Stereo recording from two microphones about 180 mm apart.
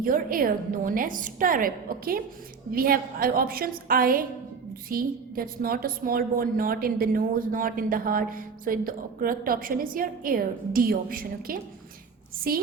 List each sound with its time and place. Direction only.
0.0 s a woman's voice: 50° right (ahead or behind)